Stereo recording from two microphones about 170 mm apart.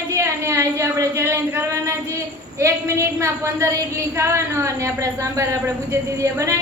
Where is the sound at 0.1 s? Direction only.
15° right (ahead or behind).